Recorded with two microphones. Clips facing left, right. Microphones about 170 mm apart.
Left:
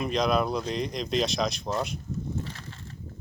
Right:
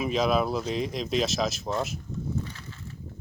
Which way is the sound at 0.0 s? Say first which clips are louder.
Right 1 dB; 5° right (ahead or behind).